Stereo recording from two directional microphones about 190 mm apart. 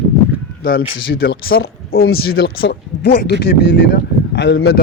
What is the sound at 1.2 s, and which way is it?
Speech, 50° left (ahead or behind).